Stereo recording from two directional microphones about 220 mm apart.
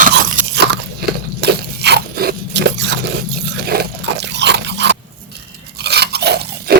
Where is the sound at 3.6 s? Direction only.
45° right (ahead or behind).